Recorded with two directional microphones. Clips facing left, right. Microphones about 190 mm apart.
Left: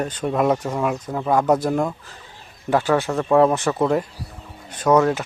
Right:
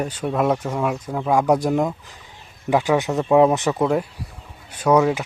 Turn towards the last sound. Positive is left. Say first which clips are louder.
# even
turn(degrees=-10)  # may be behind; listen again after turning